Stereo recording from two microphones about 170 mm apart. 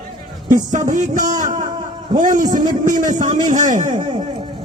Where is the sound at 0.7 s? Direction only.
50° right (ahead or behind).